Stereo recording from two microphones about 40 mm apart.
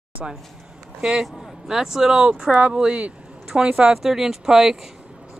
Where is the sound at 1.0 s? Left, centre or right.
Centre.